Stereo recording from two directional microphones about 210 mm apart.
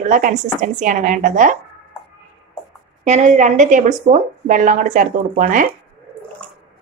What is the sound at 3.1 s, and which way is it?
A woman's voice, 35° right (ahead or behind).